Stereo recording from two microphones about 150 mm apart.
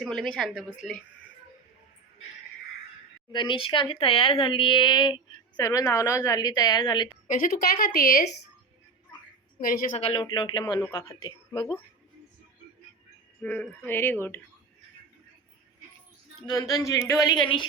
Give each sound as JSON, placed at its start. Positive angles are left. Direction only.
{"t": 0.0, "sound": "a woman's voice", "side_deg": 5}
{"t": 3.3, "sound": "speech", "side_deg": 35}
{"t": 7.3, "sound": "a woman's voice", "side_deg": 70}
{"t": 9.6, "sound": "a woman's voice", "side_deg": 70}
{"t": 10.0, "sound": "speech", "side_deg": 35}
{"t": 10.8, "sound": "speech", "side_deg": 15}
{"t": 11.2, "sound": "speech", "side_deg": 30}
{"t": 13.4, "sound": "speech", "side_deg": 10}
{"t": 16.5, "sound": "speech", "side_deg": 25}